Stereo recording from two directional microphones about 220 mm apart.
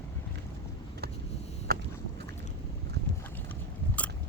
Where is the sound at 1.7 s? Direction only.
45° right (ahead or behind).